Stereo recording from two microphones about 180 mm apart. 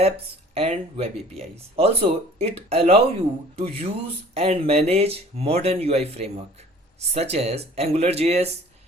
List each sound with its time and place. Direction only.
0.5 s speech: 35° right (ahead or behind)